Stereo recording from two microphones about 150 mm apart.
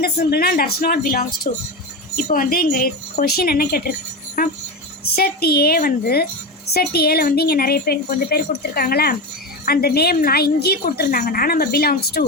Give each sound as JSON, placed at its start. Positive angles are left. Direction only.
{"t": 0.0, "sound": "a woman's voice", "side_deg": 90}
{"t": 2.1, "sound": "a woman's voice", "side_deg": 65}
{"t": 5.0, "sound": "a woman's voice", "side_deg": 90}